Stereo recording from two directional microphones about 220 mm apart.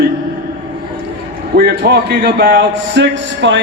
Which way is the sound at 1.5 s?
45° right (ahead or behind).